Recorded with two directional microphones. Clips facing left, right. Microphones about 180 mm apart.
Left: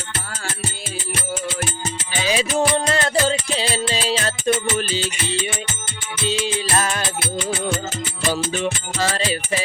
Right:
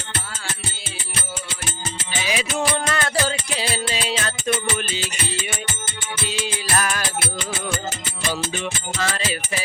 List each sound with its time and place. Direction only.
2.2 s music: 30° left (ahead or behind)
8.3 s music: 35° left (ahead or behind)